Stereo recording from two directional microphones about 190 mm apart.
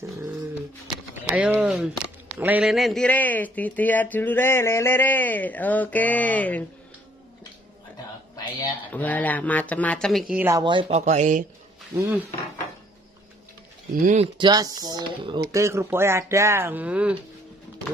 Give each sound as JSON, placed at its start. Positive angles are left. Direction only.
{"t": 1.1, "sound": "speech", "side_deg": -10}
{"t": 8.9, "sound": "speech", "side_deg": 10}
{"t": 10.6, "sound": "speech", "side_deg": -25}
{"t": 11.9, "sound": "speech", "side_deg": -15}
{"t": 13.9, "sound": "speech", "side_deg": -45}
{"t": 14.2, "sound": "speech", "side_deg": -25}